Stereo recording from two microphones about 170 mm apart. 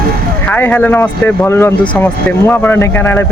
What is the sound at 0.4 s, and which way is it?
A man's voice, 10° left (ahead or behind).